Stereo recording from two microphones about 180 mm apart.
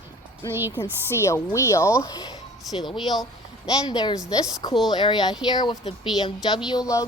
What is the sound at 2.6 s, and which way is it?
Speech, centre (ahead or behind).